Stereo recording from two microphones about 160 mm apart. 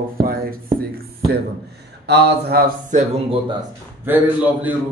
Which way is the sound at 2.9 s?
50° right (ahead or behind).